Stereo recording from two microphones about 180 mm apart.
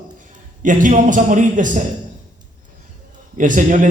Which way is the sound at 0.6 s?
45° right (ahead or behind).